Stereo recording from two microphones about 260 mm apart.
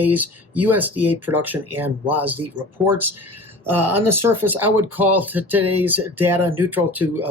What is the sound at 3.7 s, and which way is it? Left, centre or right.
Speech, right.